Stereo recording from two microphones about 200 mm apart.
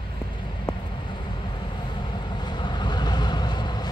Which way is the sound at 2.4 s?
20° left (ahead or behind).